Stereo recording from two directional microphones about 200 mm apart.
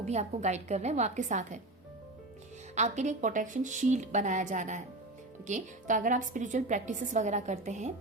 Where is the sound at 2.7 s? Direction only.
35° right (ahead or behind).